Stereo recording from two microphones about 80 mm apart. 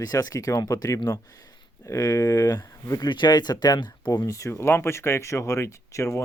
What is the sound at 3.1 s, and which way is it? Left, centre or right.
Speech, left.